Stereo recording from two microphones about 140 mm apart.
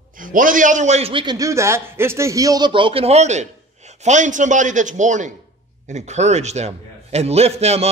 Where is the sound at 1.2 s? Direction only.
25° right (ahead or behind).